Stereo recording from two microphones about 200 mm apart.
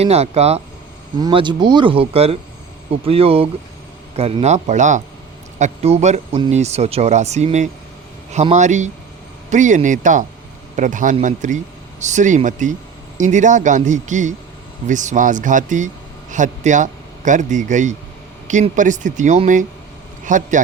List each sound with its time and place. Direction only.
0.0 s a man's voice: 30° right (ahead or behind)